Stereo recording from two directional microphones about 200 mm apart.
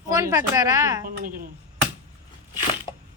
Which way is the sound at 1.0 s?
45° right (ahead or behind).